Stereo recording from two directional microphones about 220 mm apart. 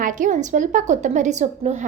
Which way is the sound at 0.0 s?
35° right (ahead or behind).